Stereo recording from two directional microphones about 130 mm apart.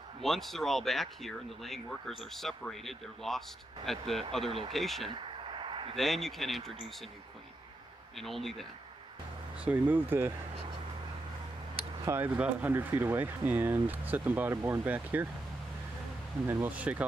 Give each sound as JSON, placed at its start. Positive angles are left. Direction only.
{"t": 0.2, "sound": "speech", "side_deg": 0}
{"t": 4.5, "sound": "speech", "side_deg": -45}
{"t": 4.7, "sound": "speech", "side_deg": 0}
{"t": 5.1, "sound": "a sound", "side_deg": -40}
{"t": 5.9, "sound": "speech", "side_deg": 0}
{"t": 8.2, "sound": "speech", "side_deg": 0}
{"t": 9.6, "sound": "speech", "side_deg": -10}
{"t": 12.2, "sound": "speech", "side_deg": -10}
{"t": 16.6, "sound": "speech", "side_deg": -10}